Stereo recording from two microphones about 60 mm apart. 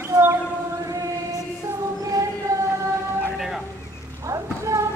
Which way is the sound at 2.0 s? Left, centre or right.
Right.